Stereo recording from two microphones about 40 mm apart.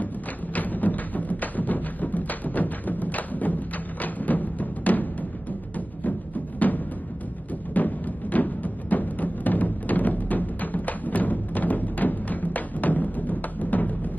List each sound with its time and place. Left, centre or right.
0.6 s music: left